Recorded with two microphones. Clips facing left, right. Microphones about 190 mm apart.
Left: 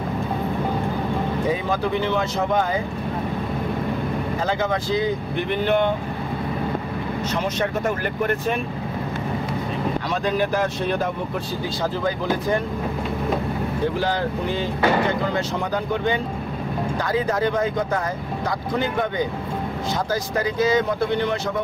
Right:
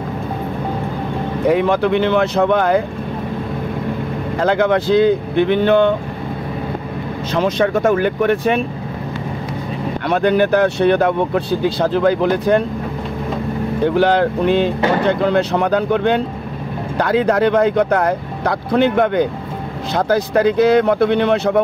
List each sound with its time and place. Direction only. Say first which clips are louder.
1.5 s speech: right 12 dB; 75° right (ahead or behind)
4.4 s speech: right 11 dB; 70° right (ahead or behind)
7.3 s speech: right 10 dB; 90° right; by 8.5 s 75° right (ahead or behind)
10.0 s speech: right 11 dB; 65° right (ahead or behind)
13.9 s speech: right 9 dB; 70° right (ahead or behind)